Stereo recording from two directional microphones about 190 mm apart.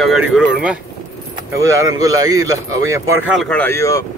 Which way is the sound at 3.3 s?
5° left (ahead or behind).